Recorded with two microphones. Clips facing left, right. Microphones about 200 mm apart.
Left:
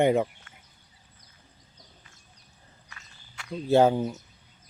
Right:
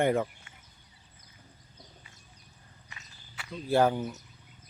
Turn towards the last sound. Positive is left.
turn(degrees=25)  # may be behind; listen again after turning